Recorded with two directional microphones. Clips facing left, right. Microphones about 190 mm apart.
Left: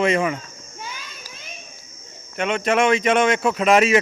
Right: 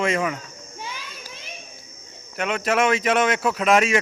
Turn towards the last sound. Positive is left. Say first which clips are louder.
# left 3 dB
turn(degrees=0)  # may be behind; listen again after turning